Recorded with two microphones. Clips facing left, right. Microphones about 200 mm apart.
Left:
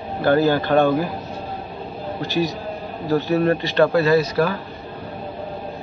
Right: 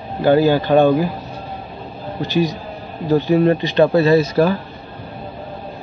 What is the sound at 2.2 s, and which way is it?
A man's voice, 20° right (ahead or behind).